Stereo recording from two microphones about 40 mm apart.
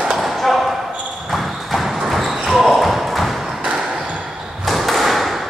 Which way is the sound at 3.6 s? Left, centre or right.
Centre.